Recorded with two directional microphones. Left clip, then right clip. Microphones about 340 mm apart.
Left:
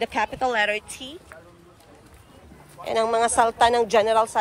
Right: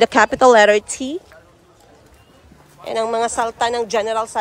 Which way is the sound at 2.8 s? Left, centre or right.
Centre.